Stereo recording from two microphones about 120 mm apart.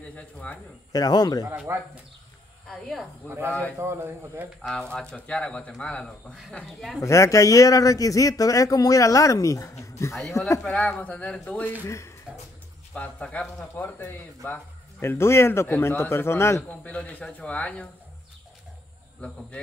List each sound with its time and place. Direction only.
0.1 s speech: 10° left (ahead or behind)
0.9 s speech: 35° left (ahead or behind)
1.7 s a man's voice: 20° right (ahead or behind)
2.7 s speech: centre (ahead or behind)
3.3 s a man's voice: 20° right (ahead or behind)
4.6 s speech: 5° left (ahead or behind)
7.0 s a man's voice: 25° left (ahead or behind)
10.6 s speech: 5° left (ahead or behind)
12.3 s a sound: 5° right (ahead or behind)
12.9 s a man's voice: 10° left (ahead or behind)
16.8 s speech: 10° left (ahead or behind)